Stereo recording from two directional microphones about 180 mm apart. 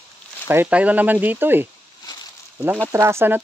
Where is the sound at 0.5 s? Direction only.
10° right (ahead or behind).